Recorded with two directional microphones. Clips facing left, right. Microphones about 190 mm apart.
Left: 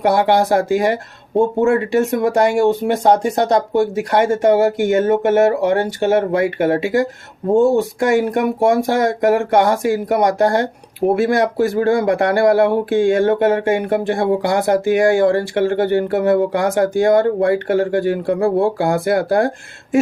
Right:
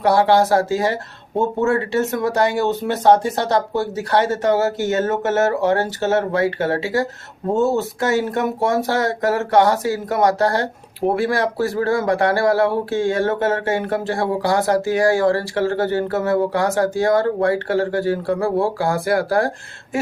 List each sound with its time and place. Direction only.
0.0 s speech: 20° left (ahead or behind)